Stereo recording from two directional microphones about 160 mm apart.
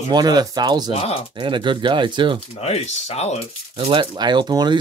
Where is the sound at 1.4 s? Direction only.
30° right (ahead or behind).